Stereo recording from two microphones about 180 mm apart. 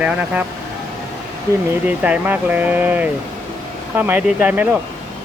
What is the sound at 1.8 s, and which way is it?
Speech, 10° right (ahead or behind).